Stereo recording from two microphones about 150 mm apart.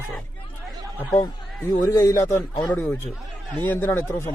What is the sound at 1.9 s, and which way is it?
Speech, 20° left (ahead or behind).